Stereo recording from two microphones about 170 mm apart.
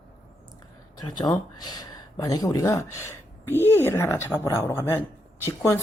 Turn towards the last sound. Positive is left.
turn(degrees=15)  # may be behind; listen again after turning